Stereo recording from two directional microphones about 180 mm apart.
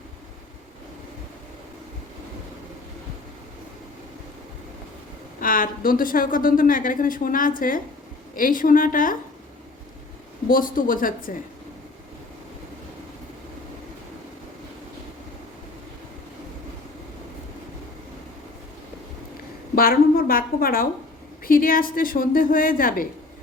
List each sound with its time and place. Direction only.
5.4 s a woman's voice: 50° left (ahead or behind)
10.5 s a woman's voice: 50° left (ahead or behind)
19.7 s a woman's voice: 55° left (ahead or behind)